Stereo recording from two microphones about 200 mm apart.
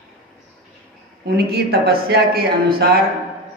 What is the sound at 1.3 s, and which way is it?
Speech, 50° right (ahead or behind).